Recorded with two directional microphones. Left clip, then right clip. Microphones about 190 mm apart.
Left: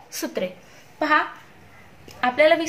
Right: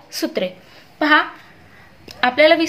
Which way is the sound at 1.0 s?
30° right (ahead or behind).